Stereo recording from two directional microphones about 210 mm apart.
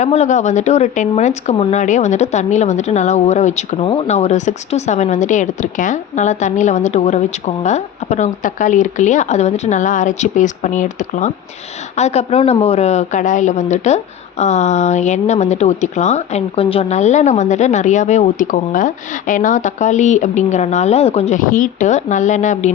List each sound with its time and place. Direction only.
0.0 s speech: 35° left (ahead or behind)